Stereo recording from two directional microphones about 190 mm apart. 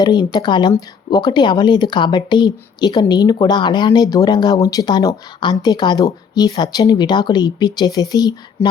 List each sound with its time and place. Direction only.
0.0 s speech: 20° left (ahead or behind)